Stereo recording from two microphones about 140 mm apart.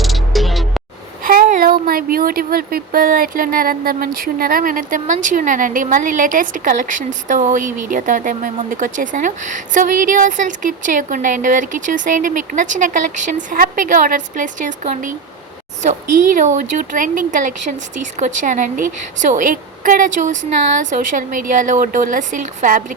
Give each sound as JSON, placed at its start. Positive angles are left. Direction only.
{"t": 0.0, "sound": "music", "side_deg": 0}
{"t": 1.2, "sound": "speech", "side_deg": -90}